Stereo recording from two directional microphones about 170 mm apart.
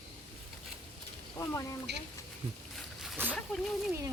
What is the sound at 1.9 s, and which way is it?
Speech, 80° right.